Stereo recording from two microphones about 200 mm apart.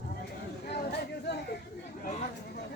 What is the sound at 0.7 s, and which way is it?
Chatter, 55° left (ahead or behind).